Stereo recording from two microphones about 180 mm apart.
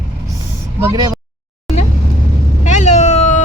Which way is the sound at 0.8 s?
20° right (ahead or behind).